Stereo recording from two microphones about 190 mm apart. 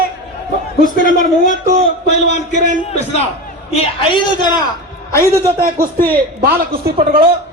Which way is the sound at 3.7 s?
30° left (ahead or behind).